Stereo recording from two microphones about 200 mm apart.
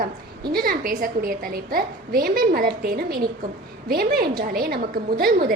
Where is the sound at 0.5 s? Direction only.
50° right (ahead or behind).